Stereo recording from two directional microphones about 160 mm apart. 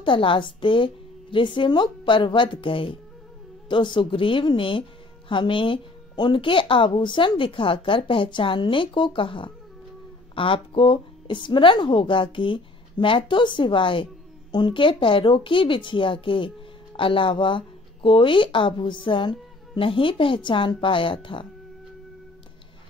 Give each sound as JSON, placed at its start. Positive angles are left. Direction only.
{"t": 0.0, "sound": "a woman's voice", "side_deg": 30}